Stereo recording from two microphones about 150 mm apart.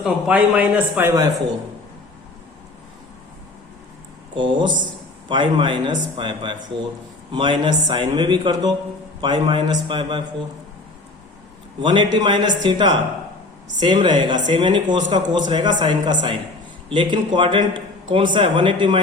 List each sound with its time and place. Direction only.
0.0 s speech: 10° right (ahead or behind)
4.4 s speech: 35° right (ahead or behind)
11.8 s speech: 30° right (ahead or behind)